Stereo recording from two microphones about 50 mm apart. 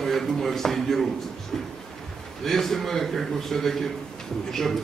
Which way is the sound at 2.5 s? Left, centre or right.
Centre.